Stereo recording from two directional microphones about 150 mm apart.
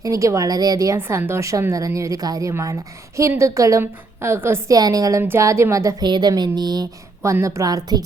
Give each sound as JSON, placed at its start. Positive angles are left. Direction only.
{"t": 0.0, "sound": "speech", "side_deg": -20}